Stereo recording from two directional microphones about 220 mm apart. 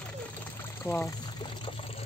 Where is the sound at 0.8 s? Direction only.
10° left (ahead or behind).